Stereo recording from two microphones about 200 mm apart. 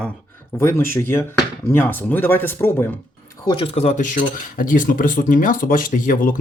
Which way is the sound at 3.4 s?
25° left (ahead or behind).